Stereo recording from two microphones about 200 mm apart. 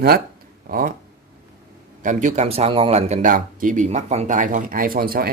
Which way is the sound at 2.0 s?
35° right (ahead or behind).